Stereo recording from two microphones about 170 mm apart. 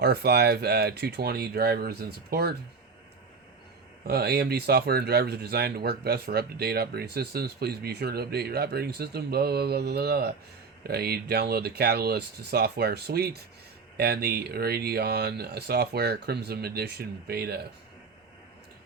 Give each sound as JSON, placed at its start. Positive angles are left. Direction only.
{"t": 0.0, "sound": "speech", "side_deg": -70}
{"t": 4.0, "sound": "speech", "side_deg": -65}